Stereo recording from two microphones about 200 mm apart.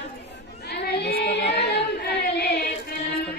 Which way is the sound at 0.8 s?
50° left (ahead or behind).